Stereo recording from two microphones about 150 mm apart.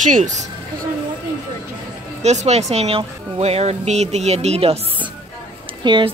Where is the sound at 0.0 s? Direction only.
55° right (ahead or behind).